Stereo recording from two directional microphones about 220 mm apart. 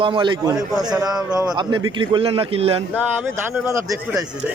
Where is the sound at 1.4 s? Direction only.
20° right (ahead or behind).